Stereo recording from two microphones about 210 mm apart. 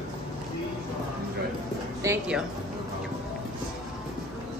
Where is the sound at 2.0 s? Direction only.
15° right (ahead or behind).